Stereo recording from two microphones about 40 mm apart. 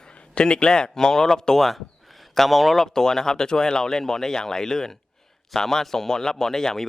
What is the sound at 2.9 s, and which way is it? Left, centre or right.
Speech, centre.